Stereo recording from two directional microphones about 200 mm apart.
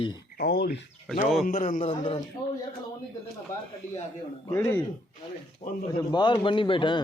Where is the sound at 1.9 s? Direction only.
25° left (ahead or behind).